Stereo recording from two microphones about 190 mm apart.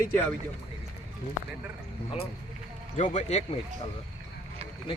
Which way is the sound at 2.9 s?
40° left (ahead or behind).